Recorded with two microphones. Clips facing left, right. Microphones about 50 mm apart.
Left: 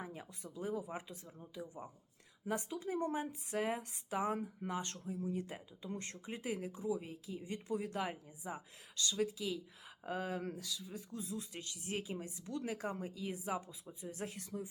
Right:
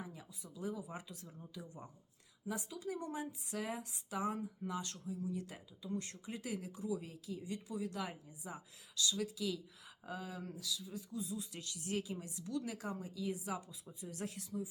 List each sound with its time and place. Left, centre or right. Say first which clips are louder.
0.0 s a sound: left 3 dB; left
0.4 s speech: left 3 dB; left
2.5 s speech: left 3 dB; left
10.1 s speech: left 6 dB; left
11.1 s speech: right 1 dB; left
11.5 s speech: right 4 dB; left
14.4 s speech: right 1 dB; left